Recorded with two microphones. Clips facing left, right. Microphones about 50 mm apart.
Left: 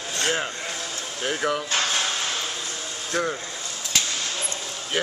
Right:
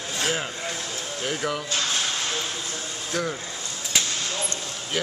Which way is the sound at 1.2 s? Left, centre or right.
Centre.